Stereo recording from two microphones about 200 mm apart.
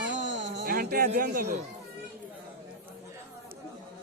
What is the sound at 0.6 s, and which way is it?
Speech, 45° right (ahead or behind).